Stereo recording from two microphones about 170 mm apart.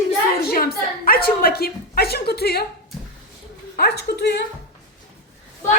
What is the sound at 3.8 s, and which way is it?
Speech, 75° left (ahead or behind).